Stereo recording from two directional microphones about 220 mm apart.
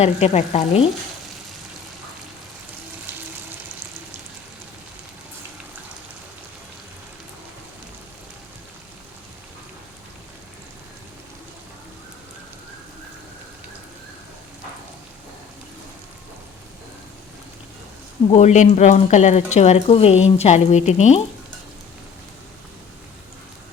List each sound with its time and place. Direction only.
0.0 s speech: 30° left (ahead or behind)
18.3 s speech: 30° left (ahead or behind)